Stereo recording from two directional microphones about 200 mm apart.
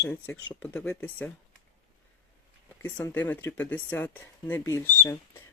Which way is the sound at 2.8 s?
10° left (ahead or behind).